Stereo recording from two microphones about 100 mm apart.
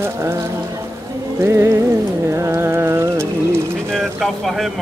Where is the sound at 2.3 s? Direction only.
30° right (ahead or behind).